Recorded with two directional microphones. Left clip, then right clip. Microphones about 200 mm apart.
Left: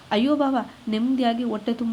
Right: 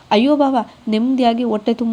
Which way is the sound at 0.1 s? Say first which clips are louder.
Right 7 dB; 20° right (ahead or behind).